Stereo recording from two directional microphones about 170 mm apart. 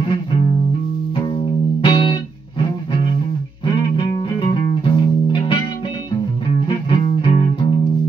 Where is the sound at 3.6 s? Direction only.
30° left (ahead or behind).